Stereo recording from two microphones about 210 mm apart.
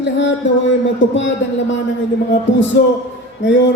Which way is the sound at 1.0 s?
60° left (ahead or behind).